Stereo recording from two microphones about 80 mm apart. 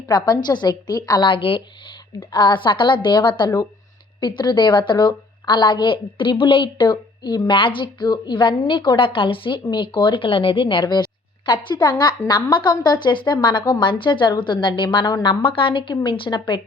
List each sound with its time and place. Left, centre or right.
0.1 s a woman's voice: left
1.2 s a woman's voice: left
2.3 s a woman's voice: left